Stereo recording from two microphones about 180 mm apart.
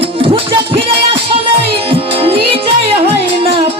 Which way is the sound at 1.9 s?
30° right (ahead or behind).